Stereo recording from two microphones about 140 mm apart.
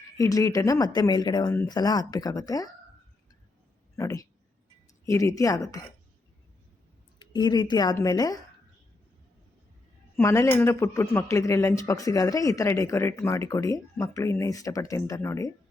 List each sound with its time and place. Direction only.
0.2 s speech: 25° left (ahead or behind)
3.9 s a sound: 25° left (ahead or behind)
5.0 s speech: 20° left (ahead or behind)
7.2 s a woman's voice: 30° left (ahead or behind)
10.2 s speech: 20° left (ahead or behind)